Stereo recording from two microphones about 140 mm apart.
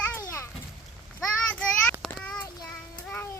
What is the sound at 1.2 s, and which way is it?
Child singing, 10° left (ahead or behind).